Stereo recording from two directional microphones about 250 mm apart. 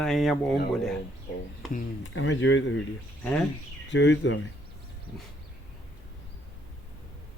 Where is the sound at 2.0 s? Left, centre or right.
Left.